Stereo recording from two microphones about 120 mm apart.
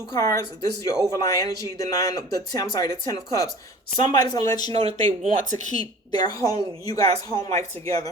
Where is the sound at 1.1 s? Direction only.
30° left (ahead or behind).